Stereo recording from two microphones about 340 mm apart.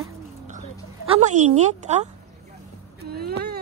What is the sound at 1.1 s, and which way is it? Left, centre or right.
Speech, right.